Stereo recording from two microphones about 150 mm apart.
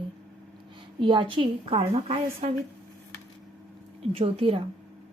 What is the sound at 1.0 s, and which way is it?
A woman's voice, 35° right (ahead or behind).